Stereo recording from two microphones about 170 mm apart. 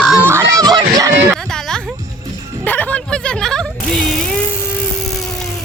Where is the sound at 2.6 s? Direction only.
10° left (ahead or behind).